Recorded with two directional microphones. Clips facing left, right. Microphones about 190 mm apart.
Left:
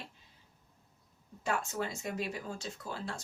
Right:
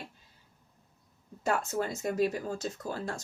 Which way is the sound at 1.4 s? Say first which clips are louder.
Right 4 dB; 45° right (ahead or behind).